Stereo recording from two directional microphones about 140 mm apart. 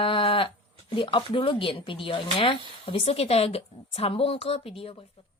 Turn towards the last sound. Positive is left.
turn(degrees=40)  # may be behind; listen again after turning